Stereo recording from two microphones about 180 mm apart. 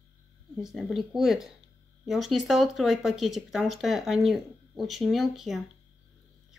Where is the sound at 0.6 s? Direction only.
Centre (ahead or behind).